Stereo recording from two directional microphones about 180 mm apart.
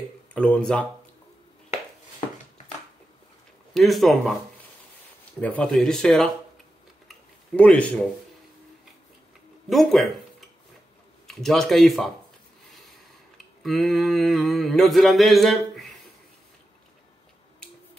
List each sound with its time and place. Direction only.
0.3 s speech: 5° left (ahead or behind)
1.7 s a sound: 40° left (ahead or behind)
3.7 s mantra: centre (ahead or behind)
5.6 s mantra: 5° left (ahead or behind)
7.1 s a sound: 5° left (ahead or behind)
9.7 s mantra: centre (ahead or behind)
11.2 s mantra: centre (ahead or behind)
13.6 s mantra: centre (ahead or behind)